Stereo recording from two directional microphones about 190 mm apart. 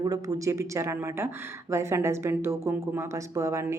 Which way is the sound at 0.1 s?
15° right (ahead or behind).